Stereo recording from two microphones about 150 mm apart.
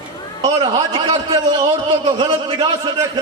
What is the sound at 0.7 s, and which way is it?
A man's voice, 30° right (ahead or behind).